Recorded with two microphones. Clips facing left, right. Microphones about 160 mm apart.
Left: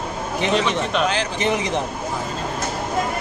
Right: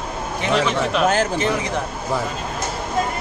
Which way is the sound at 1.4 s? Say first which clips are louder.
Even; 20° left (ahead or behind).